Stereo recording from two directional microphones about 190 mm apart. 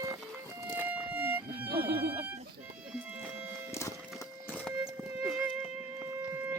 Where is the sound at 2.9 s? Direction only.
5° right (ahead or behind).